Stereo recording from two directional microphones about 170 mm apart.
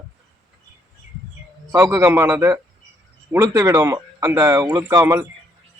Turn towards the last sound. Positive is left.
turn(degrees=-20)  # may be behind; listen again after turning